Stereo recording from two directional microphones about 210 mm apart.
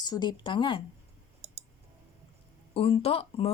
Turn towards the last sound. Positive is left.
turn(degrees=25)  # may be behind; listen again after turning